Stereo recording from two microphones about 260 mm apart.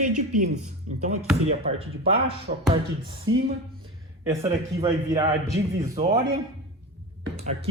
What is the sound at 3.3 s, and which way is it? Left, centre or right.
Speech, right.